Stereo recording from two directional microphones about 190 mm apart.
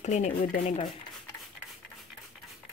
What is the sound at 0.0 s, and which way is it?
Speech, 40° left (ahead or behind).